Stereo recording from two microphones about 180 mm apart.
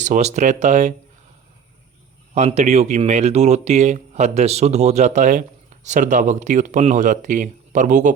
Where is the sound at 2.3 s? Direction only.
40° right (ahead or behind).